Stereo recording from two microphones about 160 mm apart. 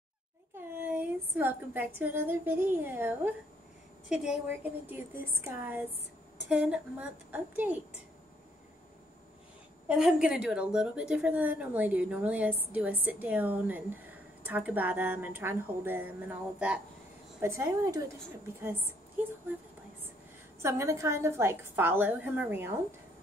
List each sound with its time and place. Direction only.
0.6 s a woman's voice: 10° right (ahead or behind)
5.5 s a woman's voice: 10° right (ahead or behind)
9.8 s a woman's voice: 5° right (ahead or behind)
20.6 s a woman's voice: 15° right (ahead or behind)